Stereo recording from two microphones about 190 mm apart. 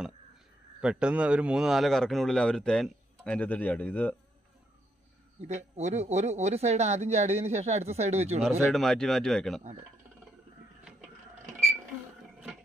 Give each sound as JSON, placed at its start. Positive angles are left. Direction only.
{"t": 0.7, "sound": "a man's voice", "side_deg": -5}
{"t": 5.4, "sound": "speech", "side_deg": -35}
{"t": 8.7, "sound": "a man's voice", "side_deg": 0}